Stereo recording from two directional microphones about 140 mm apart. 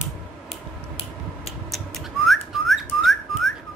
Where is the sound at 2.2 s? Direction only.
Centre (ahead or behind).